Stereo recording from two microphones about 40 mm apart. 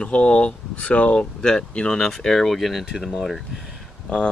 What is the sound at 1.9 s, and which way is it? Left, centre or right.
Speech, centre.